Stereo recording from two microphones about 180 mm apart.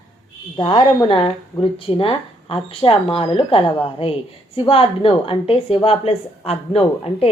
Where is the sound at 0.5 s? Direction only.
25° left (ahead or behind).